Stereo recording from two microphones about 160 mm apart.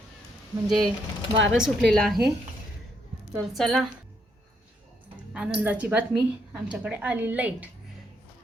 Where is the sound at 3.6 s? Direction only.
Centre (ahead or behind).